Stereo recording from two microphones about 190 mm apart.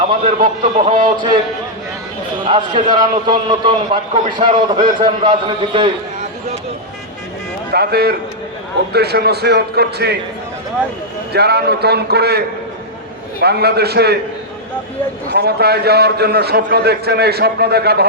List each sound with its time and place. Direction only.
0.3 s a man's voice: 40° right (ahead or behind)
0.9 s a man's voice: 25° right (ahead or behind)
2.4 s a man's voice: 25° right (ahead or behind)
7.7 s a man's voice: 55° right (ahead or behind)
11.3 s a man's voice: 60° right (ahead or behind)
13.4 s a man's voice: 60° right (ahead or behind)
15.3 s a man's voice: 55° right (ahead or behind)